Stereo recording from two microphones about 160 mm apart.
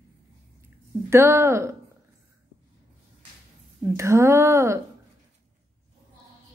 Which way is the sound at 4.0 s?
20° right (ahead or behind).